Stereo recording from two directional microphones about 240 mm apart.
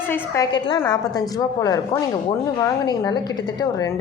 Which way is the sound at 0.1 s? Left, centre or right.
Centre.